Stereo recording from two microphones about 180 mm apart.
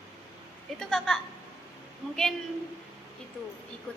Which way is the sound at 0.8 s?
Centre (ahead or behind).